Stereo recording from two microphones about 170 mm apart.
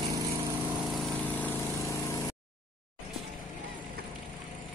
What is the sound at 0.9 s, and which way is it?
Vehicle, centre (ahead or behind).